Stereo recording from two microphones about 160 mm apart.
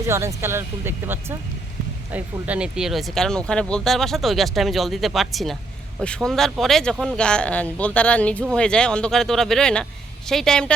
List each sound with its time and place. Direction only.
0.0 s speech: 15° right (ahead or behind); by 10.7 s 5° left (ahead or behind)